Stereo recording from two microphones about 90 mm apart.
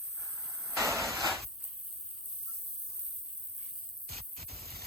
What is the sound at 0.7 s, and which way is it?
Vehicle, 35° right (ahead or behind).